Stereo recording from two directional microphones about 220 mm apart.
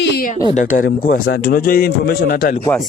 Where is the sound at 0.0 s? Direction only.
45° left (ahead or behind).